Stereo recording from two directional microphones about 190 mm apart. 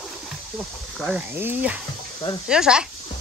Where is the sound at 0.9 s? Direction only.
5° right (ahead or behind).